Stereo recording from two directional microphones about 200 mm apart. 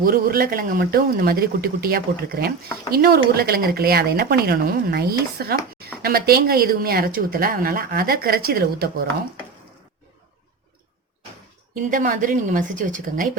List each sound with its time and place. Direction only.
0.0 s a woman's voice: 45° right (ahead or behind)
11.7 s a woman's voice: 40° right (ahead or behind)